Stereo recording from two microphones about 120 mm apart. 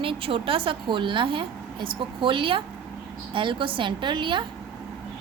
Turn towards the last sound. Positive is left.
turn(degrees=-40)  # may be behind; listen again after turning